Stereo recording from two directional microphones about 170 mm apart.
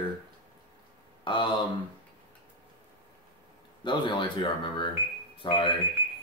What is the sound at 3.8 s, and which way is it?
Speech, 30° left (ahead or behind).